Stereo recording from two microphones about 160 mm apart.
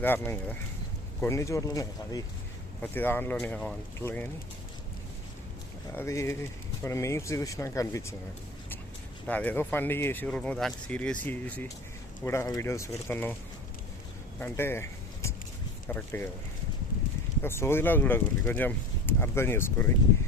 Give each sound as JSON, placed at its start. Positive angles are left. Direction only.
{"t": 0.0, "sound": "speech", "side_deg": 15}
{"t": 2.8, "sound": "speech", "side_deg": 10}
{"t": 6.0, "sound": "speech", "side_deg": 20}
{"t": 9.2, "sound": "speech", "side_deg": 10}
{"t": 14.3, "sound": "a sound", "side_deg": 10}
{"t": 15.9, "sound": "speech", "side_deg": 10}
{"t": 17.4, "sound": "speech", "side_deg": 15}